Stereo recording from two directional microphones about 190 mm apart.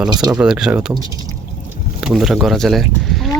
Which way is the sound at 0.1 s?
20° right (ahead or behind).